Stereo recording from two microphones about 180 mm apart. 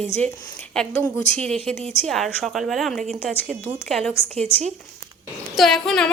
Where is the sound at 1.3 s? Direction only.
5° left (ahead or behind).